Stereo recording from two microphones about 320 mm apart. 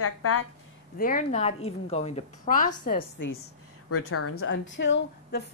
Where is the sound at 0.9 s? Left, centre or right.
Left.